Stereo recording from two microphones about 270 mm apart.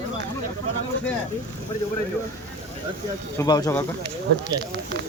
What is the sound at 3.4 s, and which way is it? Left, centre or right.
Speech, centre.